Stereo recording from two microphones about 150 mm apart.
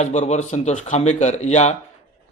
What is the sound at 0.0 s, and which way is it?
Speech, 50° left (ahead or behind).